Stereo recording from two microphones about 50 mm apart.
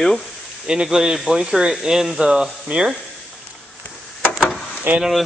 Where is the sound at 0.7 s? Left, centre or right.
Centre.